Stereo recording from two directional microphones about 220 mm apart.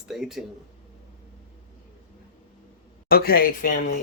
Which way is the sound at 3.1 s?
45° left (ahead or behind).